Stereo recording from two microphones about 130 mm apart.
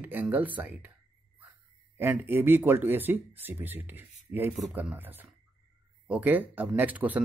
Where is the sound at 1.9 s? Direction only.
15° right (ahead or behind).